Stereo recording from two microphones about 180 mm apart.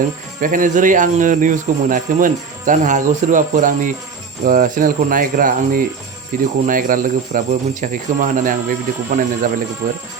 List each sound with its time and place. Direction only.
0.3 s speech: 50° right (ahead or behind)